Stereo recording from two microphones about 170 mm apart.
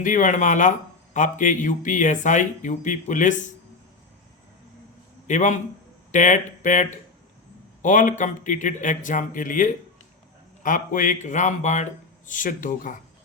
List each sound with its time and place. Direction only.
0.0 s speech: 50° left (ahead or behind)
5.3 s speech: 45° left (ahead or behind)